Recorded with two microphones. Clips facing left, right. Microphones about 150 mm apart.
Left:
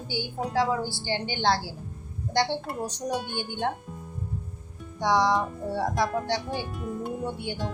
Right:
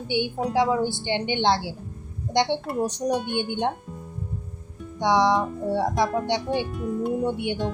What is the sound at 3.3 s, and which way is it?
Speech, 20° right (ahead or behind).